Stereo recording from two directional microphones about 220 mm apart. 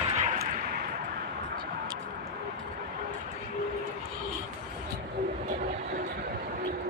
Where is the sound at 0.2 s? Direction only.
35° right (ahead or behind).